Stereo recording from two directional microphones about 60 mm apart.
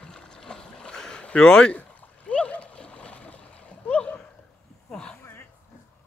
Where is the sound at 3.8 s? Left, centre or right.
Centre.